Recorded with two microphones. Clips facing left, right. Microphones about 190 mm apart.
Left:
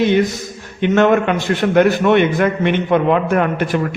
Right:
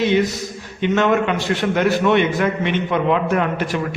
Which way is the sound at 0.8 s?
55° left (ahead or behind).